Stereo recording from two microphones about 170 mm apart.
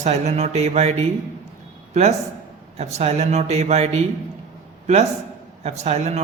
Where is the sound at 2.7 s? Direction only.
40° right (ahead or behind).